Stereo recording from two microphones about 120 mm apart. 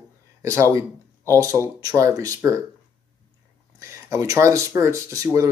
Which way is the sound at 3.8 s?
25° right (ahead or behind).